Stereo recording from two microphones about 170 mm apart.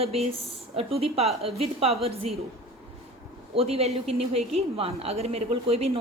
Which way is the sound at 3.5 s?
35° right (ahead or behind).